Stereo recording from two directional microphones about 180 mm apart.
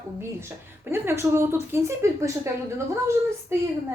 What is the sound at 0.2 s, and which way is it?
A woman's voice, 15° right (ahead or behind).